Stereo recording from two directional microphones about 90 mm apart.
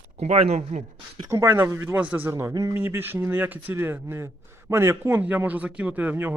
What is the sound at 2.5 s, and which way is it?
Speech, 40° right (ahead or behind).